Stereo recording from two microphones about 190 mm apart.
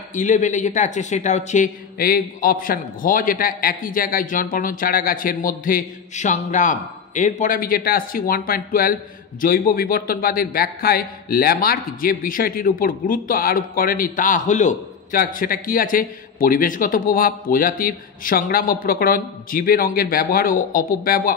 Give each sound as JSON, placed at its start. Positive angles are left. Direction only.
{"t": 0.1, "sound": "a man's voice", "side_deg": 40}